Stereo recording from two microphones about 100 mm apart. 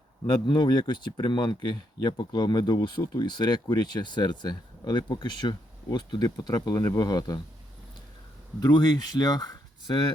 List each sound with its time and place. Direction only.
0.3 s speech: 50° left (ahead or behind)
8.6 s speech: 45° left (ahead or behind)